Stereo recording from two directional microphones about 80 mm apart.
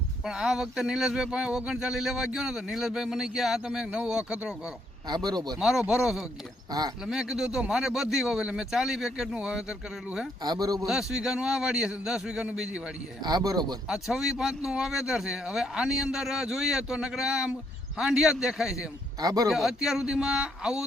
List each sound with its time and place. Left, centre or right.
0.3 s speech: centre
5.0 s speech: right
5.5 s a man's voice: centre
6.7 s speech: right
7.0 s a man's voice: centre
10.4 s speech: right
10.8 s speech: centre
13.2 s speech: right
13.8 s a man's voice: centre
19.2 s speech: right
19.5 s speech: centre